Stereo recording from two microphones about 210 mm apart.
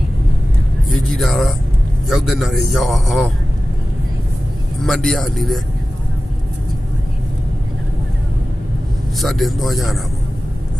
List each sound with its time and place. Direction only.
1.1 s a man's voice: centre (ahead or behind)
4.8 s a man's voice: centre (ahead or behind)
9.1 s a man's voice: centre (ahead or behind)